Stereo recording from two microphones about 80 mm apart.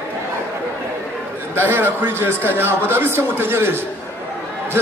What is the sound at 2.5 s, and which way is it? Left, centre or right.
A man's voice, right.